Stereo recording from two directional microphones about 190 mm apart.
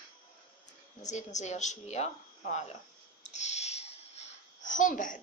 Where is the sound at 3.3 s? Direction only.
35° left (ahead or behind).